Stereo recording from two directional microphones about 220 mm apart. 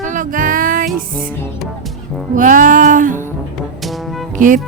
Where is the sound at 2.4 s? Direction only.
35° right (ahead or behind).